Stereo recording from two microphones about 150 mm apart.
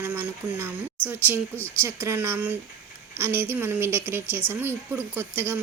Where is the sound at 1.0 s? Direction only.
10° right (ahead or behind).